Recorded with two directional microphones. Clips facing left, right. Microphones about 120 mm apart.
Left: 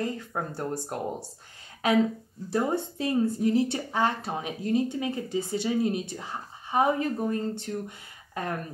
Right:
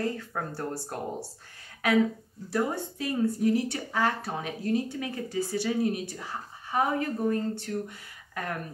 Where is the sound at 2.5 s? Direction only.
25° left (ahead or behind).